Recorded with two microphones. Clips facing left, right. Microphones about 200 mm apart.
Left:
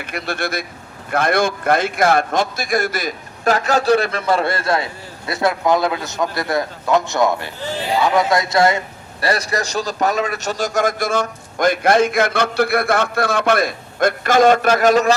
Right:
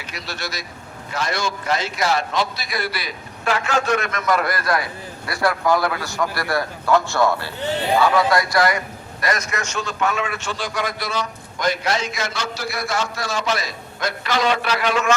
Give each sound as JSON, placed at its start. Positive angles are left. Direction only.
{"t": 0.0, "sound": "a man's voice", "side_deg": 55}